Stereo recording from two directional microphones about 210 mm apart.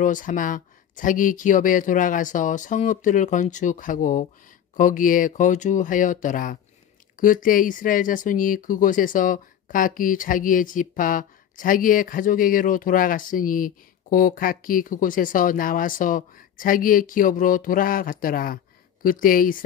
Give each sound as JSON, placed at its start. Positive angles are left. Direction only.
{"t": 0.0, "sound": "speech", "side_deg": 35}